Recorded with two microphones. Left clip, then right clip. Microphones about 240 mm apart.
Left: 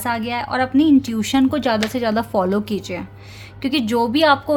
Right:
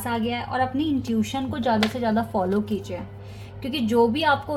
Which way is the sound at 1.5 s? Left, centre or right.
Left.